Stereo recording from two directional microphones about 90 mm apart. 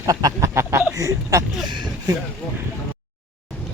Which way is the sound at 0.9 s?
35° right (ahead or behind).